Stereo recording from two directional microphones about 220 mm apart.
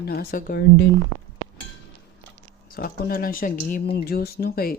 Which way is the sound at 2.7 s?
40° left (ahead or behind).